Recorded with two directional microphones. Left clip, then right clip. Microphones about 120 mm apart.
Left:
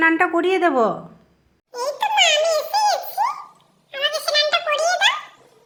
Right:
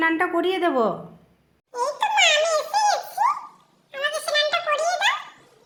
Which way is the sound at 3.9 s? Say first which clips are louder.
Left 3 dB; 15° left (ahead or behind).